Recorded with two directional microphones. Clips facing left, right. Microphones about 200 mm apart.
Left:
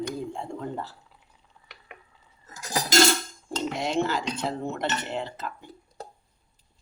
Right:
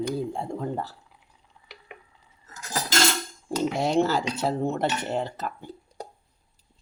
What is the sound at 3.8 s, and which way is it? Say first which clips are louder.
Speech: right 3 dB; 40° right (ahead or behind).